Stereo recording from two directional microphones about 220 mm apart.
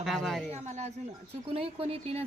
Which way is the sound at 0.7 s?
30° right (ahead or behind).